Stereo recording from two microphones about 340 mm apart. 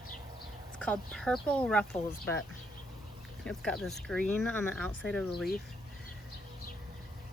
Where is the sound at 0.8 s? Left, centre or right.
Centre.